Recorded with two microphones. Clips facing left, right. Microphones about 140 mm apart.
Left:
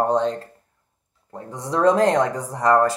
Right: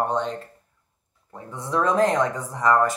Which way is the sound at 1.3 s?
35° left (ahead or behind).